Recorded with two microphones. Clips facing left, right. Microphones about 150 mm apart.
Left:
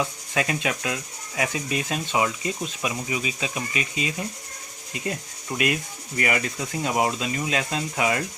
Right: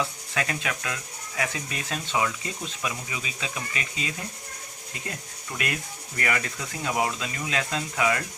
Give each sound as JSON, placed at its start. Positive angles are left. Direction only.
{"t": 0.0, "sound": "speech", "side_deg": 20}
{"t": 5.0, "sound": "ratchet", "side_deg": 20}
{"t": 6.1, "sound": "speech", "side_deg": 20}